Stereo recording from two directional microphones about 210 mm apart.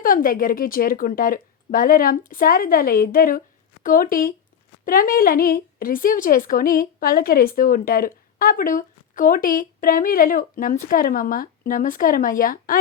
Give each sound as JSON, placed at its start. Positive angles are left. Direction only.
{"t": 0.0, "sound": "a woman's voice", "side_deg": 40}